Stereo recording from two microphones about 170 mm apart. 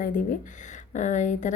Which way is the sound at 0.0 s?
50° left (ahead or behind).